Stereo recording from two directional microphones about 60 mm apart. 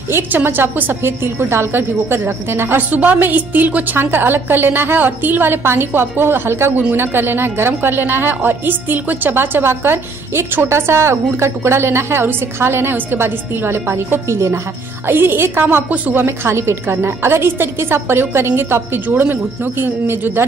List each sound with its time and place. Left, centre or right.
0.3 s a woman's voice: right
2.9 s a woman's voice: right
10.7 s a woman's voice: right
15.0 s a woman's voice: right
16.3 s a woman's voice: right